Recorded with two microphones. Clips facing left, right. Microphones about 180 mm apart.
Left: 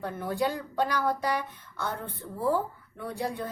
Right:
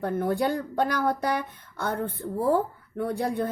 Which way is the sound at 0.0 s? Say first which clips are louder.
Right 4 dB; 55° right (ahead or behind).